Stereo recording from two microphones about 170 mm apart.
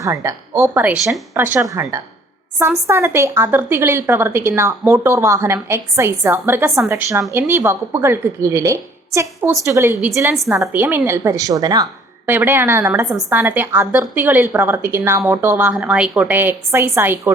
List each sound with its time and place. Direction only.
0.0 s a woman's voice: 15° right (ahead or behind)
12.2 s a woman's voice: 10° right (ahead or behind)
13.1 s a woman's voice: centre (ahead or behind)
13.4 s a woman's voice: 10° right (ahead or behind)